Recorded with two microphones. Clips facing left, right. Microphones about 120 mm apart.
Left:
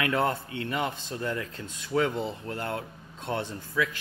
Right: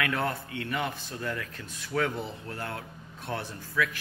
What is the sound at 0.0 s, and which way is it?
Speech, 25° left (ahead or behind).